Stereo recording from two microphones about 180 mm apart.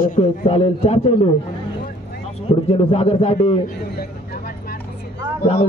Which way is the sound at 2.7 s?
35° left (ahead or behind).